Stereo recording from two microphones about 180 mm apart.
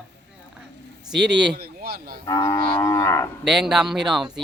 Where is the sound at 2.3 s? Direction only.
20° left (ahead or behind).